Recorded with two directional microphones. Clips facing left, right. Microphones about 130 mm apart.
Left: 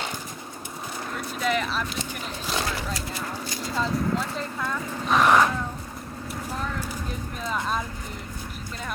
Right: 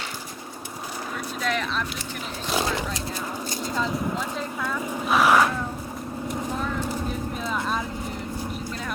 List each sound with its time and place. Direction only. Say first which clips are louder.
1.4 s speech: left 2 dB; 5° left (ahead or behind)
2.6 s horse: right 3 dB; 20° right (ahead or behind)
3.8 s speech: left 2 dB; 5° right (ahead or behind)
7.4 s vehicle: left 1 dB; centre (ahead or behind)